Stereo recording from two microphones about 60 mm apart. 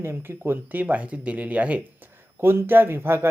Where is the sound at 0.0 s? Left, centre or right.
Right.